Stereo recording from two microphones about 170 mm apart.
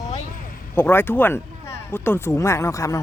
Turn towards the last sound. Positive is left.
turn(degrees=20)  # may be behind; listen again after turning